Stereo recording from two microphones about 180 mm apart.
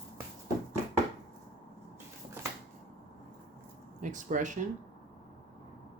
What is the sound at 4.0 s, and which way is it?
Speech, 45° right (ahead or behind).